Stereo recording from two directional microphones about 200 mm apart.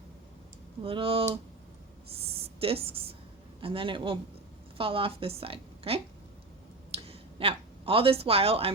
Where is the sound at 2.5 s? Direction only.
30° right (ahead or behind).